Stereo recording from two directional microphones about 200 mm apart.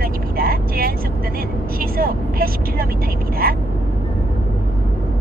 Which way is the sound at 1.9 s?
45° right (ahead or behind).